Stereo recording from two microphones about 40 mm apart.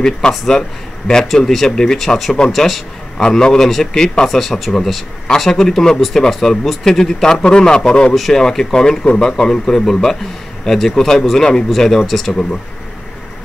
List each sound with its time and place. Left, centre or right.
0.5 s speech: centre
3.2 s speech: centre
4.3 s speech: centre
6.6 s speech: centre
6.9 s speech: centre
7.3 s a man's voice: left; by 12.4 s centre